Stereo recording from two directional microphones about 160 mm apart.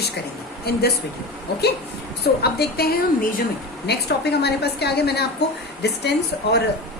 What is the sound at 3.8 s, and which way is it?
A woman's voice, 90° left.